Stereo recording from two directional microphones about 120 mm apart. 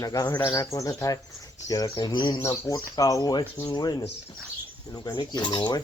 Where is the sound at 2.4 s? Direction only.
25° left (ahead or behind).